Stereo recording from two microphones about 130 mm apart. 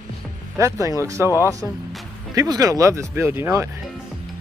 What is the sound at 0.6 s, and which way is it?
Speech, 25° right (ahead or behind).